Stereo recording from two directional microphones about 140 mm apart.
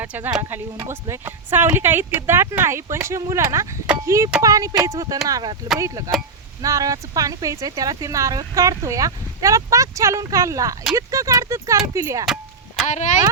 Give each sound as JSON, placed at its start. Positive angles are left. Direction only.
{"t": 0.0, "sound": "speech", "side_deg": -10}
{"t": 12.2, "sound": "clang", "side_deg": -5}
{"t": 12.8, "sound": "speech", "side_deg": 60}